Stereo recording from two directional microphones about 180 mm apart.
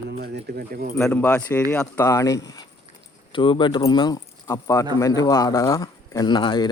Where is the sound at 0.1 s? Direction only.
60° right (ahead or behind).